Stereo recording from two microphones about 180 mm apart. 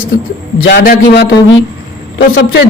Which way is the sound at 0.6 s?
55° left (ahead or behind).